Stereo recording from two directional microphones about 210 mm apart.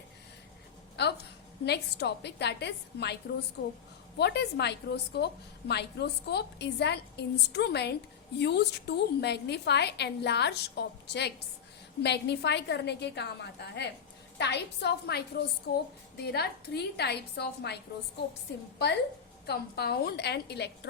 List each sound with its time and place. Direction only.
1.0 s a woman's voice: 55° left (ahead or behind)
3.6 s a woman's voice: 70° left (ahead or behind)
4.2 s a woman's voice: 50° left (ahead or behind)
19.5 s a woman's voice: 50° left (ahead or behind)